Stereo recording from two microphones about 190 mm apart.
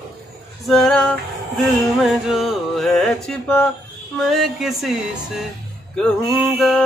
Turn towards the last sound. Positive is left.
turn(degrees=0)  # may be behind; listen again after turning